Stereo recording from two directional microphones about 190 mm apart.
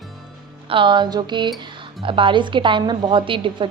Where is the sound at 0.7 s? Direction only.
25° right (ahead or behind).